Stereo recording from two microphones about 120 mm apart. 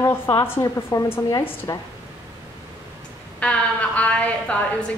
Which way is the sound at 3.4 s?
10° left (ahead or behind).